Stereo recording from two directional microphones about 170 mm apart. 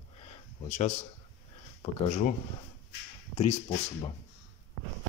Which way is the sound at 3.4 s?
40° left (ahead or behind).